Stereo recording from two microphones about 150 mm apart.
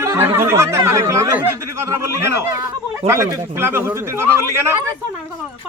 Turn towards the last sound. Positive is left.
turn(degrees=-15)  # may be behind; listen again after turning